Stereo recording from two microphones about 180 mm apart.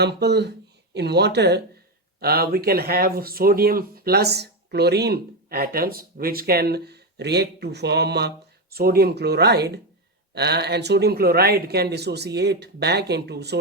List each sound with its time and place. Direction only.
0.0 s speech: 70° right (ahead or behind)